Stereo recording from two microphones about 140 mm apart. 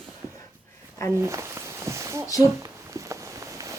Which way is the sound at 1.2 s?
20° right (ahead or behind).